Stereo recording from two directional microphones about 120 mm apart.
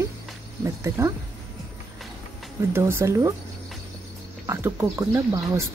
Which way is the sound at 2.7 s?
20° right (ahead or behind).